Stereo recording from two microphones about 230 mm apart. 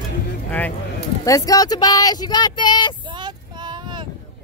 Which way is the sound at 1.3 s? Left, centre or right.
Centre.